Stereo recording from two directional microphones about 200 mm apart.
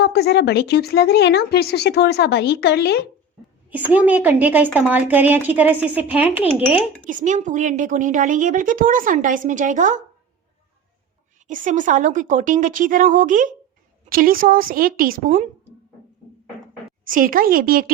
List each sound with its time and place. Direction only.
0.0 s speech: 55° left (ahead or behind)
3.7 s a woman's voice: 10° right (ahead or behind)
7.1 s a woman's voice: 40° right (ahead or behind)
11.4 s a woman's voice: 40° right (ahead or behind)
17.1 s a woman's voice: 45° right (ahead or behind)